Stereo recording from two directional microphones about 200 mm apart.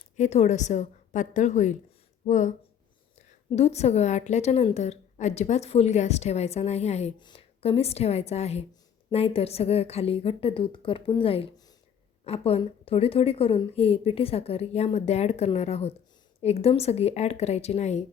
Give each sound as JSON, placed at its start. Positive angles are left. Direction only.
{"t": 0.2, "sound": "a woman's voice", "side_deg": 35}